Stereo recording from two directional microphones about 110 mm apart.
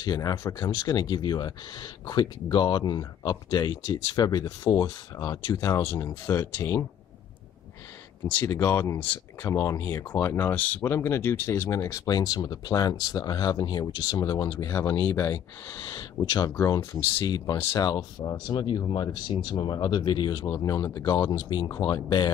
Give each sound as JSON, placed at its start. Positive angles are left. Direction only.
{"t": 0.0, "sound": "speech", "side_deg": 35}
{"t": 5.8, "sound": "speech", "side_deg": 20}
{"t": 8.5, "sound": "speech", "side_deg": 25}
{"t": 15.0, "sound": "speech", "side_deg": 20}
{"t": 15.9, "sound": "speech", "side_deg": 40}